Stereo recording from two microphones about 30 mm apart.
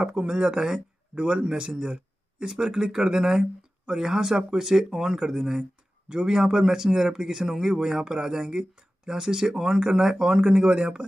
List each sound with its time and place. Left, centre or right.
0.0 s speech: right
0.4 s speech: centre
1.1 s a man's voice: right
2.5 s speech: centre
5.6 s speech: right